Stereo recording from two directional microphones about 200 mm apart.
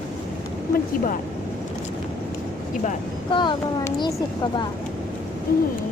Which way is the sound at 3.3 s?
25° left (ahead or behind).